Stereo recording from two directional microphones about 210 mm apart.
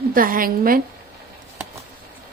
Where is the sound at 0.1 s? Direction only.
40° right (ahead or behind).